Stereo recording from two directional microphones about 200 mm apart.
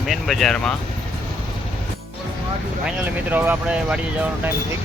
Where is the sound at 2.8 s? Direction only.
10° right (ahead or behind).